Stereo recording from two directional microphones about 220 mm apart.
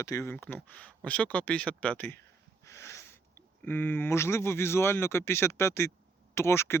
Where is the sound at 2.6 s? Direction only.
10° left (ahead or behind).